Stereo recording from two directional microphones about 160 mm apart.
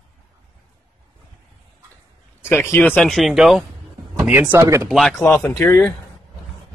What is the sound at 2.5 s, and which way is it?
Speech, 15° left (ahead or behind).